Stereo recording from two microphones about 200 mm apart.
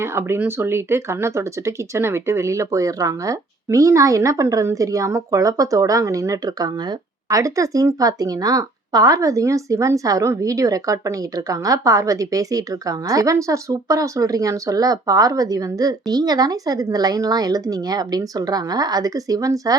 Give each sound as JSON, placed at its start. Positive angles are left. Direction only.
{"t": 0.0, "sound": "speech", "side_deg": -10}